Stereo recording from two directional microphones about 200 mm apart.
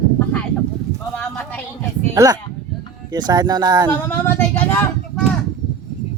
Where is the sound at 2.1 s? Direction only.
15° right (ahead or behind).